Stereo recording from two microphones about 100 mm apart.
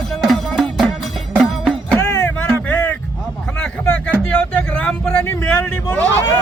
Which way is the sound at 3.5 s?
15° left (ahead or behind).